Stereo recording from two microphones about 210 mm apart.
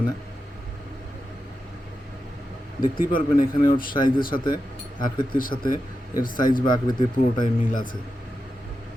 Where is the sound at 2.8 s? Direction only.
40° left (ahead or behind).